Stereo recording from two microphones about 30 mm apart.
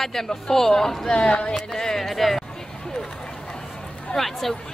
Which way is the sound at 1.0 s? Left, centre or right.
Left.